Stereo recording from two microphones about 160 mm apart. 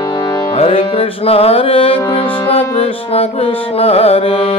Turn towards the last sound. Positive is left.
turn(degrees=35)  # may be behind; listen again after turning